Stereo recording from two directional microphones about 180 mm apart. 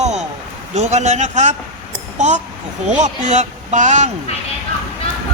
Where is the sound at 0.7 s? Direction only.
40° right (ahead or behind).